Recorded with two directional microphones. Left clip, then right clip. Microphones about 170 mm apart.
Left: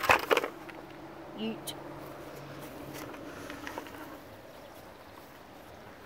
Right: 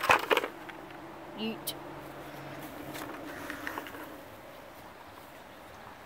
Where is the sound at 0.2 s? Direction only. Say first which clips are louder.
Even; 15° left (ahead or behind).